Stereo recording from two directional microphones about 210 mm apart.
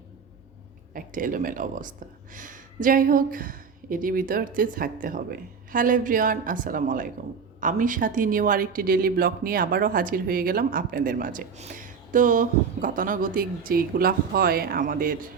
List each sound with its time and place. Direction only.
0.9 s speech: 40° right (ahead or behind)